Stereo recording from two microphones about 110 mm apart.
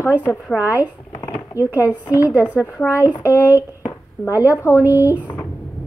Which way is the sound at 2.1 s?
30° left (ahead or behind).